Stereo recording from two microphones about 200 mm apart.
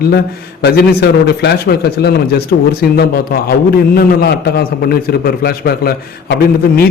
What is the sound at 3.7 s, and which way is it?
A man's voice, 50° left (ahead or behind).